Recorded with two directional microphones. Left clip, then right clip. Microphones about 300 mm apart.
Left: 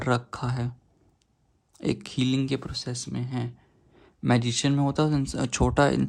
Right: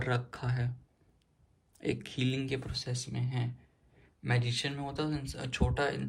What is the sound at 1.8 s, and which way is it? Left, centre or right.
Speech, centre.